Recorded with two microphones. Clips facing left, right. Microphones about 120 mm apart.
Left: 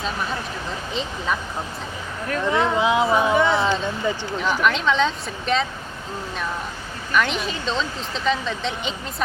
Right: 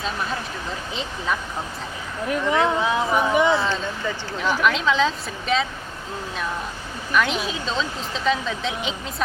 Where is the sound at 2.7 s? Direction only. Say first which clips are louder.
Left 3 dB; 15° left (ahead or behind).